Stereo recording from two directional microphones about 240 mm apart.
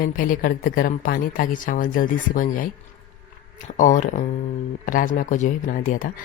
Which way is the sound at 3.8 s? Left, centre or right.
Left.